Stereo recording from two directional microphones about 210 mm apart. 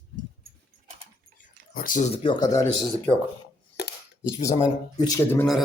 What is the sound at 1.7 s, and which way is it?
Speech, 40° left (ahead or behind).